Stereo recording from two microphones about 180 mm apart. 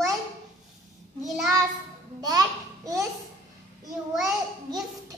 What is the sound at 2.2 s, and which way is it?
Babbling, 20° right (ahead or behind).